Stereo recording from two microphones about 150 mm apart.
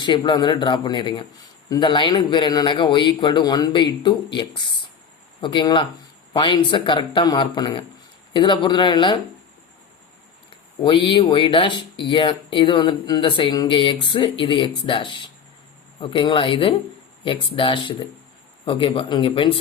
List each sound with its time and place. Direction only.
0.0 s speech: 30° left (ahead or behind)
10.5 s speech: 30° left (ahead or behind)